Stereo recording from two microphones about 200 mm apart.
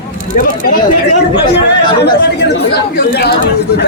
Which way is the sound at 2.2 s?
55° left (ahead or behind).